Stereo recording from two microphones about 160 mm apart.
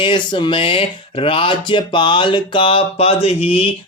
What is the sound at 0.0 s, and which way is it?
Speech, 30° left (ahead or behind).